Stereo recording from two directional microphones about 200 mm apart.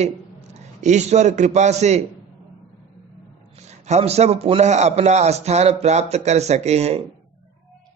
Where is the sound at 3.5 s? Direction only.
35° right (ahead or behind).